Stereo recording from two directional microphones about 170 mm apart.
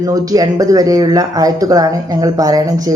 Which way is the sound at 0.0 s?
20° right (ahead or behind).